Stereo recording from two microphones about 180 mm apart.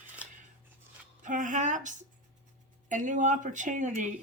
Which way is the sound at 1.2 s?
45° right (ahead or behind).